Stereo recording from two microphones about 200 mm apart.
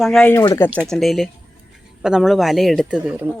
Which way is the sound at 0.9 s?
Centre (ahead or behind).